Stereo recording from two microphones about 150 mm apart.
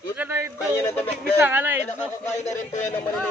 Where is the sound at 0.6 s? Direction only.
20° left (ahead or behind).